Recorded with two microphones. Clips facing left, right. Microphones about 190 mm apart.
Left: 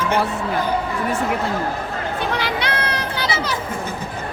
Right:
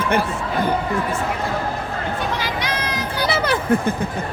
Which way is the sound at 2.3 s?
65° left (ahead or behind).